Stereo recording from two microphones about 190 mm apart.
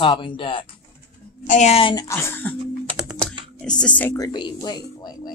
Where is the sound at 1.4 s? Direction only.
35° left (ahead or behind).